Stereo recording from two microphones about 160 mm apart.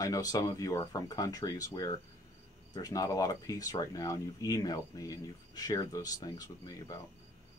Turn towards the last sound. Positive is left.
turn(degrees=25)  # may be behind; listen again after turning